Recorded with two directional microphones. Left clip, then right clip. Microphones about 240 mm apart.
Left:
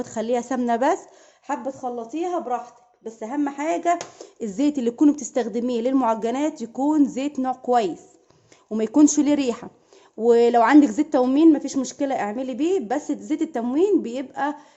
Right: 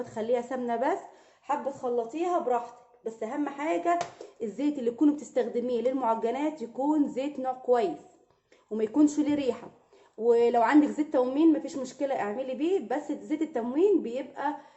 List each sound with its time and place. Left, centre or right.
0.0 s a woman's voice: left